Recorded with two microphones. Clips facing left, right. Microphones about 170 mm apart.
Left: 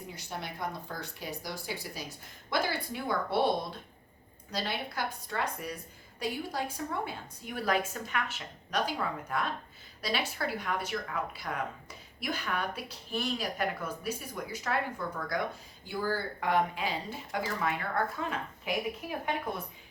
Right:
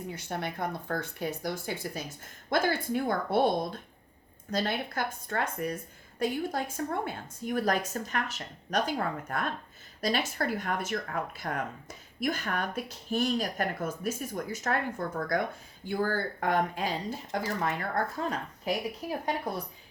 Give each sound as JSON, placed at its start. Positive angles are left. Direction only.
{"t": 0.2, "sound": "speech", "side_deg": -55}